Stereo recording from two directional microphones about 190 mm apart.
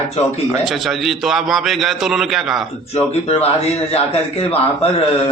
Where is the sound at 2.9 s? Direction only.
30° left (ahead or behind).